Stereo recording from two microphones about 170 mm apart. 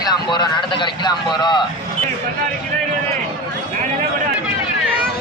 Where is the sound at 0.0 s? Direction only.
25° left (ahead or behind).